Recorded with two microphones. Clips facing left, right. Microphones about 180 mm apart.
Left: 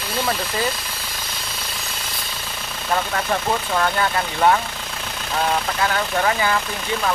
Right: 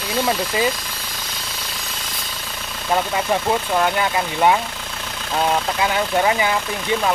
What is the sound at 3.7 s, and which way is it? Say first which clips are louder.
Speech: right 1 dB; 15° right (ahead or behind).